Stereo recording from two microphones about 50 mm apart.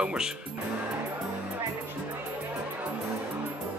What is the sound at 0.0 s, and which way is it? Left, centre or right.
Speech, centre.